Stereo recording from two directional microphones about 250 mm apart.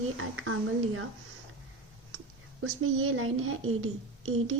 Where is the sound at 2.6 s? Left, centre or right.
Right.